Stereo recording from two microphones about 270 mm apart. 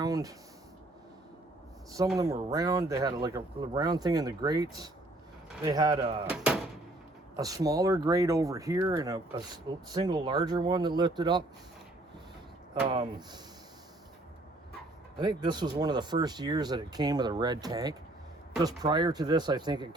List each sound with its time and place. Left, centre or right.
0.0 s a sound: centre
2.1 s speech: centre
6.2 s speech: centre
12.9 s speech: centre
15.2 s speech: centre